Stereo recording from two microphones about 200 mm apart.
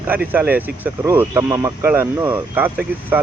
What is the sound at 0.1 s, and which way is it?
Speech, 10° right (ahead or behind).